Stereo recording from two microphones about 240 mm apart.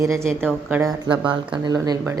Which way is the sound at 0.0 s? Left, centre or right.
Centre.